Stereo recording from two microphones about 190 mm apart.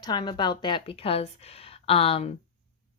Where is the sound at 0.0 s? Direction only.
25° left (ahead or behind).